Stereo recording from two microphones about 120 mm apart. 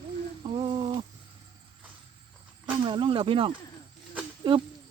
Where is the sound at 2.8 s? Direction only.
45° right (ahead or behind).